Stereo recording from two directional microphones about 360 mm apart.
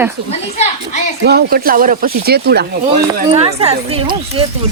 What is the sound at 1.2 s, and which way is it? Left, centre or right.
Speech, right.